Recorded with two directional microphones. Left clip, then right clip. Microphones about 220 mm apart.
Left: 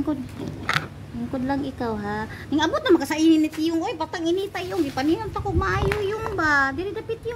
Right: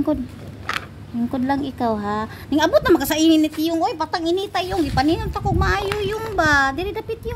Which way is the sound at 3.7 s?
30° right (ahead or behind).